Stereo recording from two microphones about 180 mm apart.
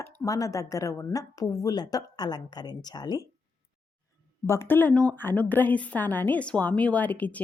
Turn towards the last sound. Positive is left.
turn(degrees=10)  # may be behind; listen again after turning